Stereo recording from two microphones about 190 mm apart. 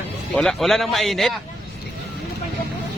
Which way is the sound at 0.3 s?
Centre (ahead or behind).